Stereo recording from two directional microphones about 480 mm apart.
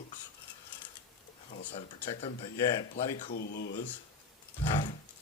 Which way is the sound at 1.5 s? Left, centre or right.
Centre.